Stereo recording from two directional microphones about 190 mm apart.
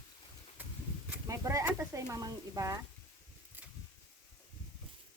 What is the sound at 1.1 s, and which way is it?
Speech, 15° right (ahead or behind).